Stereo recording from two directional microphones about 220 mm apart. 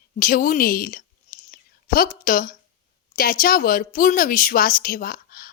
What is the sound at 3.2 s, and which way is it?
Speech, 40° left (ahead or behind).